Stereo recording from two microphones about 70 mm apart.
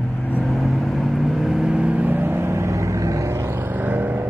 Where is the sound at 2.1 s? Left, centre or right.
Right.